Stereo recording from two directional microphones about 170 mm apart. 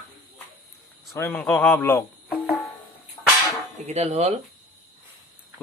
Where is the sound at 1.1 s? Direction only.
15° left (ahead or behind).